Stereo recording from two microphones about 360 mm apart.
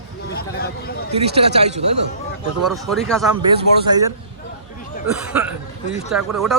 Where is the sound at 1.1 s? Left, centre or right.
Centre.